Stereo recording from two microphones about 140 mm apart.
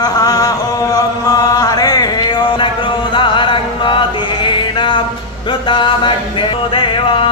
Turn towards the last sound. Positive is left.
turn(degrees=40)  # may be behind; listen again after turning